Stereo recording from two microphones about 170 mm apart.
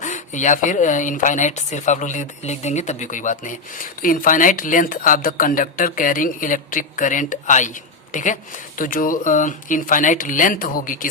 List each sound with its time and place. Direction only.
0.0 s speech: 45° left (ahead or behind)